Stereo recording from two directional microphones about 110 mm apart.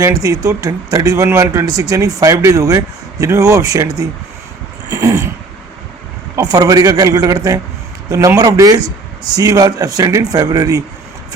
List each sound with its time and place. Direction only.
0.0 s speech: 35° right (ahead or behind)
4.9 s cat: 30° right (ahead or behind)
6.3 s speech: 35° right (ahead or behind)